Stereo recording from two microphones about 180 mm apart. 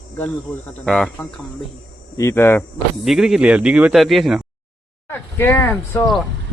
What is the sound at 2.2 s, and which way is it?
Speech, 15° left (ahead or behind).